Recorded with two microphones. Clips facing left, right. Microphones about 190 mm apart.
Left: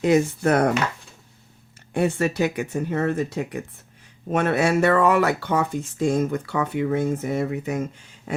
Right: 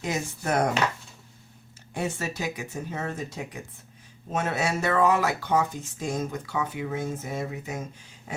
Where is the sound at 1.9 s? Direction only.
60° left (ahead or behind).